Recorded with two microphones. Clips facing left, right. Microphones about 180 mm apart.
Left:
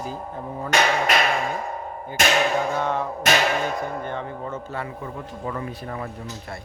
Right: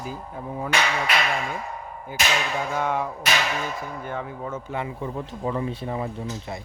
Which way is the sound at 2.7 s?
10° right (ahead or behind).